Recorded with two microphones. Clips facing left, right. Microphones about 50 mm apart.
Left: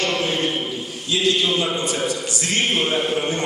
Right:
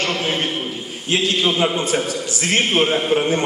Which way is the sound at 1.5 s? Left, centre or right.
Right.